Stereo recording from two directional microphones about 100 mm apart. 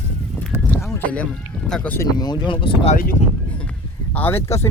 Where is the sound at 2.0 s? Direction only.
45° left (ahead or behind).